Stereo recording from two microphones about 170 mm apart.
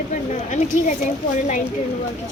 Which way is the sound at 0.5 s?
45° left (ahead or behind).